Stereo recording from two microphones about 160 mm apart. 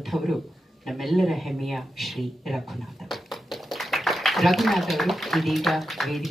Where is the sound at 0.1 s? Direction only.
15° right (ahead or behind).